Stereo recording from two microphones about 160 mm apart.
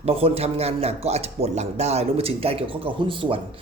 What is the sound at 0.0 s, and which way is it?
Speech, 40° right (ahead or behind).